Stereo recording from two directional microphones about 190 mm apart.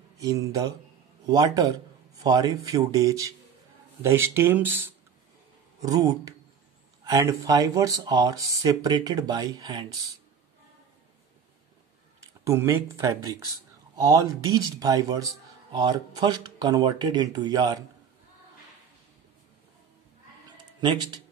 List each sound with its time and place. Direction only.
0.2 s speech: 15° right (ahead or behind)
12.2 s speech: 15° right (ahead or behind)
20.8 s speech: 25° right (ahead or behind)